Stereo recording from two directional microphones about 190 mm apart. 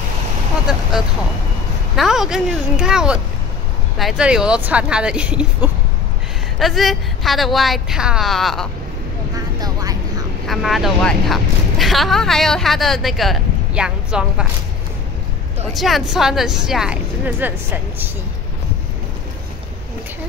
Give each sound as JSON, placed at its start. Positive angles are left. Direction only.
{"t": 0.7, "sound": "speech", "side_deg": -5}
{"t": 2.0, "sound": "speech", "side_deg": 0}
{"t": 9.6, "sound": "vehicle", "side_deg": -20}
{"t": 10.4, "sound": "speech", "side_deg": 0}
{"t": 15.7, "sound": "speech", "side_deg": 0}